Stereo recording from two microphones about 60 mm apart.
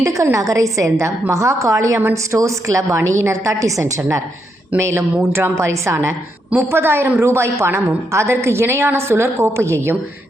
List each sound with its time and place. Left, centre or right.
0.0 s a woman's voice: right
4.8 s a woman's voice: right
6.6 s a woman's voice: right